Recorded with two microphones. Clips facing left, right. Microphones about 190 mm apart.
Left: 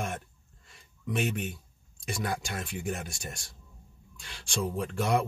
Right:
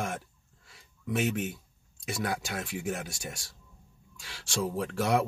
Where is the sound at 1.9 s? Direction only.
65° right (ahead or behind).